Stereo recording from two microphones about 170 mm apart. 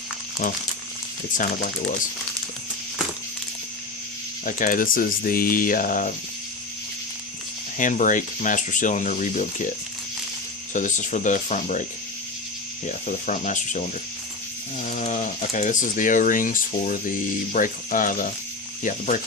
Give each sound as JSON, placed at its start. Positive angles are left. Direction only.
{"t": 0.4, "sound": "speech", "side_deg": 50}
{"t": 4.4, "sound": "speech", "side_deg": 50}
{"t": 7.8, "sound": "speech", "side_deg": 50}
{"t": 10.8, "sound": "speech", "side_deg": 45}
{"t": 12.9, "sound": "speech", "side_deg": 45}